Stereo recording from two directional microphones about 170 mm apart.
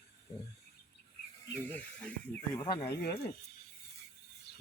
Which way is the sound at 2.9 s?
70° left (ahead or behind).